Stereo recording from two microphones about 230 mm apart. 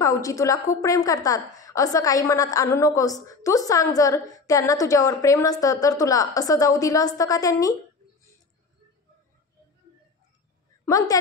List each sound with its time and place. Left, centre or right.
0.0 s a woman's voice: centre
10.9 s a woman's voice: centre